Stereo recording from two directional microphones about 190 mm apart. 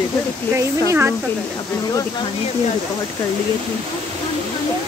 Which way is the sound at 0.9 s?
10° right (ahead or behind).